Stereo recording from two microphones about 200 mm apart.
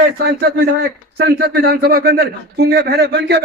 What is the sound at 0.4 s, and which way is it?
A man's voice, 50° right (ahead or behind).